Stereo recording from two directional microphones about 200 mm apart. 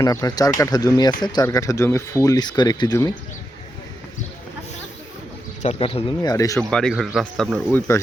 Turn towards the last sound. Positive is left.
turn(degrees=0)  # may be behind; listen again after turning